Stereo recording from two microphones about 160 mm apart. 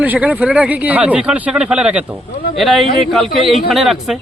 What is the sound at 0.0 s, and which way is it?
A man's voice, 10° right (ahead or behind).